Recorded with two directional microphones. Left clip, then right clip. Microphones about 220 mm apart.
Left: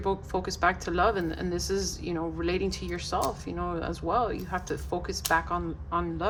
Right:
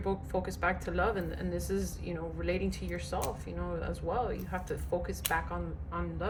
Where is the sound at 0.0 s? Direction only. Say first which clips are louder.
Left 4 dB; 20° left (ahead or behind).